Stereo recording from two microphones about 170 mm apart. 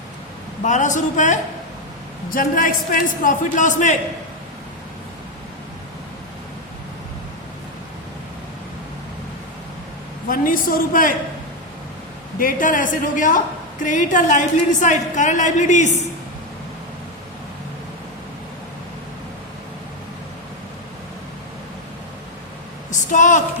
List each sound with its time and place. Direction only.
0.6 s a woman's voice: 45° left (ahead or behind)
10.2 s a woman's voice: 55° left (ahead or behind)
12.4 s a woman's voice: 55° left (ahead or behind)
22.9 s a sound: 45° left (ahead or behind)